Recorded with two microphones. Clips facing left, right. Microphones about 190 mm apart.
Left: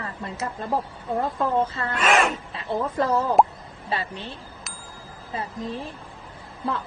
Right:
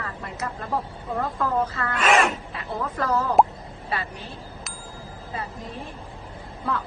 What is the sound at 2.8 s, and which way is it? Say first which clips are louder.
Speech: left 2 dB; 30° left (ahead or behind).